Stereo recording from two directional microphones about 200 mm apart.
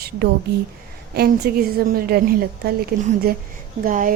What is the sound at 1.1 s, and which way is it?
A woman's voice, 50° right (ahead or behind).